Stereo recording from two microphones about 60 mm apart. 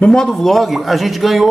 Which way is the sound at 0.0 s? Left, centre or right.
Centre.